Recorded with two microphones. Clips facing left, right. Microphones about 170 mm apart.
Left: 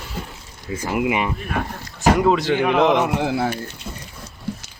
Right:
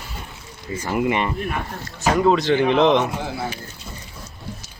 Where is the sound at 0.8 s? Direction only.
5° left (ahead or behind).